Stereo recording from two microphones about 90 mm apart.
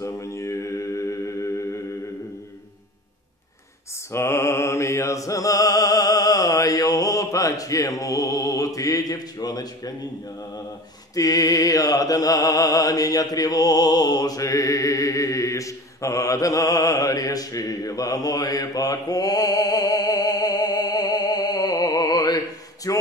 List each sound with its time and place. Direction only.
0.0 s mantra: 35° left (ahead or behind)
4.1 s mantra: 30° left (ahead or behind)
11.1 s mantra: 40° left (ahead or behind)
22.9 s a sound: 40° left (ahead or behind)